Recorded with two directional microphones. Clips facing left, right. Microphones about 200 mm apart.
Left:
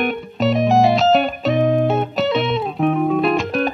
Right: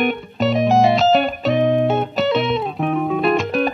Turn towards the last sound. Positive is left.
turn(degrees=0)  # may be behind; listen again after turning